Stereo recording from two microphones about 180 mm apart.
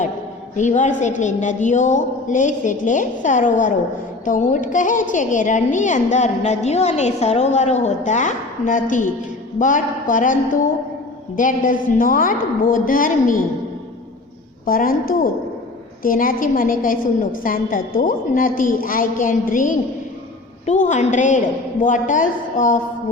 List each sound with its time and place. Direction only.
0.5 s a woman's voice: 40° left (ahead or behind)
14.7 s a woman's voice: 50° left (ahead or behind)